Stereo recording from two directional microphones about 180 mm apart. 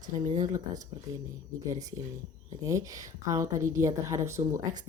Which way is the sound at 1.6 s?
20° right (ahead or behind).